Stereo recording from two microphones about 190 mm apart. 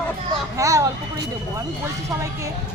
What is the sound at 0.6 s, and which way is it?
Speech, 15° right (ahead or behind).